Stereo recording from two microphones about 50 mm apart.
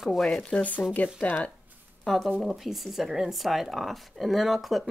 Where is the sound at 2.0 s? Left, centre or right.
Centre.